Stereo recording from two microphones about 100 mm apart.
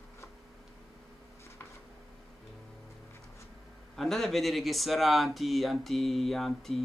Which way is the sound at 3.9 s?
Centre (ahead or behind).